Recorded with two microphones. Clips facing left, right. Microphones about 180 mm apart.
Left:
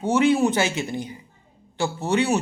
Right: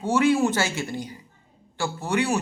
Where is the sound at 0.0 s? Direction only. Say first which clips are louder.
Left 2 dB; 20° left (ahead or behind).